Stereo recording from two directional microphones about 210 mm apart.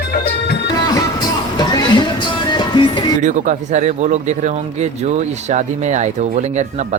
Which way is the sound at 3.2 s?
35° right (ahead or behind).